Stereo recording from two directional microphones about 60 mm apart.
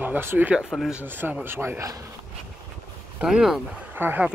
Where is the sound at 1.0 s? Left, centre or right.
Right.